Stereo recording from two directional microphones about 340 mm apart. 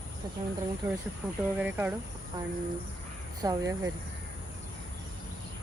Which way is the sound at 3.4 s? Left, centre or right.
Centre.